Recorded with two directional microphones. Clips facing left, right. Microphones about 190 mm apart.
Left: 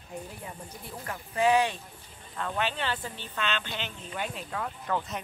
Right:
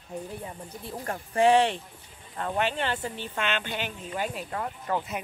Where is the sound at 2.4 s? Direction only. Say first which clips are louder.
Right 3 dB; 50° right (ahead or behind).